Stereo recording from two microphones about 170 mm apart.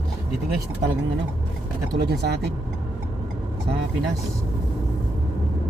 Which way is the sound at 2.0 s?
75° right (ahead or behind).